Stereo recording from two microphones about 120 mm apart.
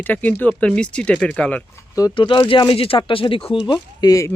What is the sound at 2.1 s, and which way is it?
Speech, 45° left (ahead or behind).